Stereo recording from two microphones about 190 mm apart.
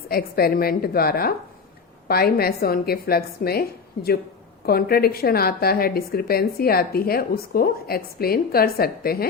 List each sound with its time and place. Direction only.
0.1 s a woman's voice: 55° left (ahead or behind)